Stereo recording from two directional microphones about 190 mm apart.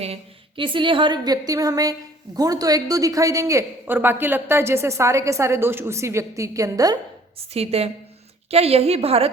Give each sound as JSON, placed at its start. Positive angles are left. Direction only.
{"t": 0.0, "sound": "a woman's voice", "side_deg": -30}
{"t": 7.5, "sound": "a woman's voice", "side_deg": -30}